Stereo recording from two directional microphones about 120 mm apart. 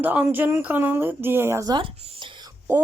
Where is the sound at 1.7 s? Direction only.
40° right (ahead or behind).